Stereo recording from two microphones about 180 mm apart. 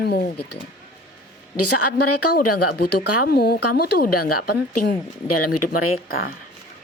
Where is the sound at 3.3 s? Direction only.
60° left (ahead or behind).